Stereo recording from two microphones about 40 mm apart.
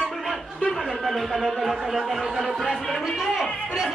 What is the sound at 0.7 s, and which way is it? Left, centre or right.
Speech, centre.